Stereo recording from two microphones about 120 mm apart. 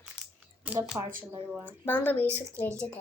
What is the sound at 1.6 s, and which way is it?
Speech, 15° left (ahead or behind).